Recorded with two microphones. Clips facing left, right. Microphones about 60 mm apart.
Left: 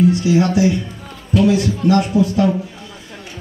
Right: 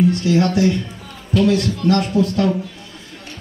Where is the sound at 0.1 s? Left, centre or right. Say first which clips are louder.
Left 2 dB; centre.